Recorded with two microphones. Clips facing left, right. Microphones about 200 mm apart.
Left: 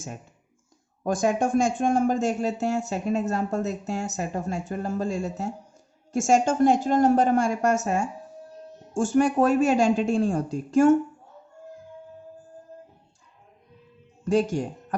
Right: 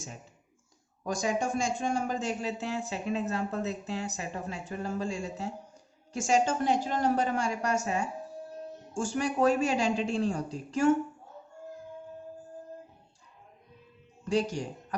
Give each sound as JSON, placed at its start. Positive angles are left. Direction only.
{"t": 1.0, "sound": "speech", "side_deg": 55}
{"t": 14.3, "sound": "speech", "side_deg": 50}